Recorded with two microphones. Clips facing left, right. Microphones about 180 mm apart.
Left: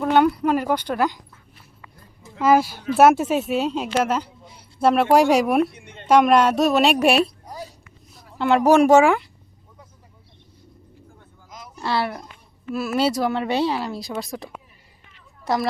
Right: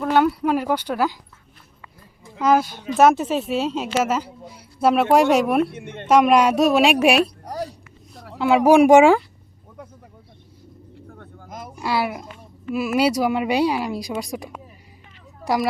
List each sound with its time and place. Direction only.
0.0 s speech: 5° right (ahead or behind)
2.4 s speech: 5° left (ahead or behind)
5.7 s speech: 55° right (ahead or behind)
6.1 s speech: 5° right (ahead or behind)
7.4 s a sound: 70° right (ahead or behind)
8.4 s speech: 5° right (ahead or behind)
11.1 s a sound: 60° right (ahead or behind)
11.8 s speech: 10° right (ahead or behind)